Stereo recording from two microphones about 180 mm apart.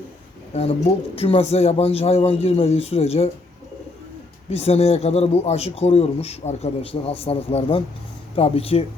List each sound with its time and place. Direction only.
1.1 s a man's voice: 35° left (ahead or behind)
4.4 s a man's voice: 35° left (ahead or behind)